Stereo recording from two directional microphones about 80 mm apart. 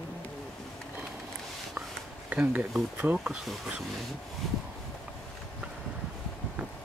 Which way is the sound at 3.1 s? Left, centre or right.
Centre.